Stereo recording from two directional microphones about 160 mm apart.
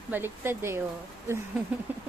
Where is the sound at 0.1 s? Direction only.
15° right (ahead or behind).